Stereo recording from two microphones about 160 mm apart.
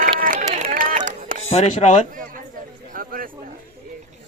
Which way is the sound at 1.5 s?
45° left (ahead or behind).